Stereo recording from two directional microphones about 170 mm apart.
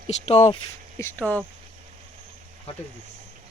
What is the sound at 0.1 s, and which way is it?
Speech, 35° left (ahead or behind).